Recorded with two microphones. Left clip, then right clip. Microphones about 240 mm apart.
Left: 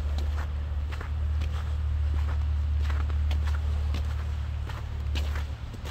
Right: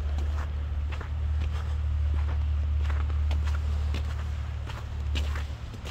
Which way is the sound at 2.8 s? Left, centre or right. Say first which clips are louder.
Left 1 dB; centre.